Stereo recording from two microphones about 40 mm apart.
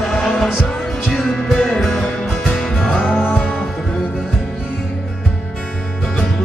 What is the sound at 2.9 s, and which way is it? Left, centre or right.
Music, centre.